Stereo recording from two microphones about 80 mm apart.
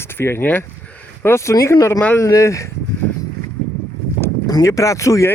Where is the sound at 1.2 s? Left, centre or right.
Left.